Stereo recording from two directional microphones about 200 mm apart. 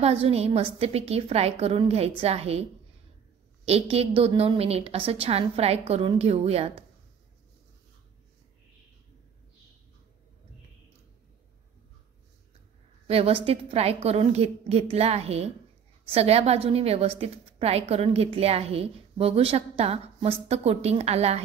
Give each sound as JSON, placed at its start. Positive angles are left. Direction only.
{"t": 0.0, "sound": "a woman's voice", "side_deg": -30}
{"t": 3.6, "sound": "a woman's voice", "side_deg": -30}
{"t": 13.0, "sound": "a woman's voice", "side_deg": -30}